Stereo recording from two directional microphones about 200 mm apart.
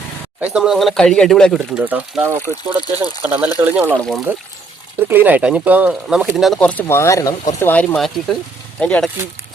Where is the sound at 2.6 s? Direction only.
25° right (ahead or behind).